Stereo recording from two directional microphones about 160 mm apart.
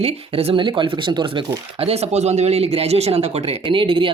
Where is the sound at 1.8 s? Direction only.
40° right (ahead or behind).